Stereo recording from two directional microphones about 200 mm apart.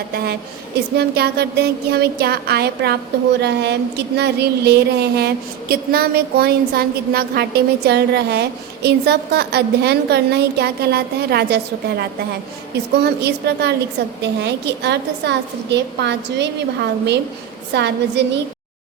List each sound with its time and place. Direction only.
0.9 s a woman's voice: 55° right (ahead or behind)
17.7 s speech: 60° right (ahead or behind)